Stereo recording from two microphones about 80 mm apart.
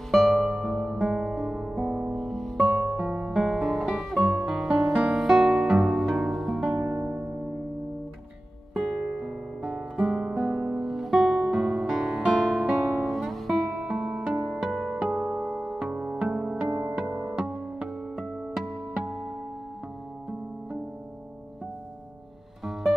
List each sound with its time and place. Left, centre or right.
0.1 s music: centre
1.9 s music: centre
8.7 s music: centre
9.6 s guitar: centre
10.6 s music: centre
15.0 s music: centre
17.4 s music: centre